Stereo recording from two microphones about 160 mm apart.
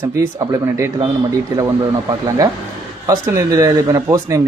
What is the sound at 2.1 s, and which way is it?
Speech, 20° right (ahead or behind).